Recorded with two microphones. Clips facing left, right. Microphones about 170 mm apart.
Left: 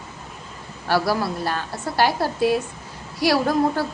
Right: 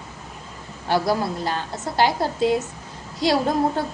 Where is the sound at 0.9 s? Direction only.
20° right (ahead or behind).